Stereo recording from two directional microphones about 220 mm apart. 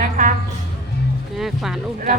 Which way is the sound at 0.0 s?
35° right (ahead or behind).